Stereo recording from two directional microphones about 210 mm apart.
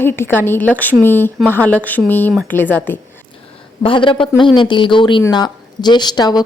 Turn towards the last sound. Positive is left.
turn(degrees=20)  # may be behind; listen again after turning